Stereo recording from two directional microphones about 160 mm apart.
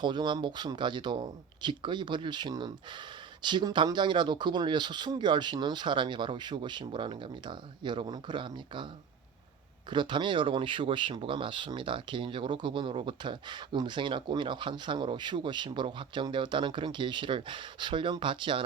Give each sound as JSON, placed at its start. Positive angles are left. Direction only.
{"t": 0.0, "sound": "speech", "side_deg": -30}
{"t": 9.9, "sound": "speech", "side_deg": -30}